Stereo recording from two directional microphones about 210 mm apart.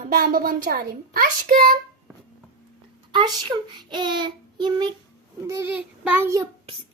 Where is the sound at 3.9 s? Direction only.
20° right (ahead or behind).